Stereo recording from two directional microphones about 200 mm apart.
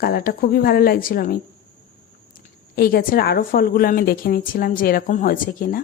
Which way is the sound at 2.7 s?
50° left (ahead or behind).